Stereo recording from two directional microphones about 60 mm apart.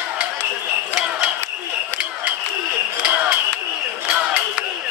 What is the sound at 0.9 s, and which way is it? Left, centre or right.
Mechanisms, centre.